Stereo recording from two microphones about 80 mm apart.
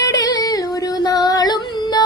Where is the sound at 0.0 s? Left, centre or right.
Left.